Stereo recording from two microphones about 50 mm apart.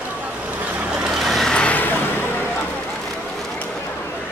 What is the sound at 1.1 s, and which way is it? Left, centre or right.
Vehicle, centre.